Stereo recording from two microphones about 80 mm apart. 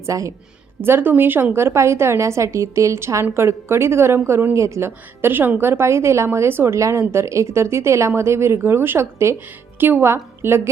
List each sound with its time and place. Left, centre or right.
0.0 s a woman's voice: right
0.8 s a woman's voice: right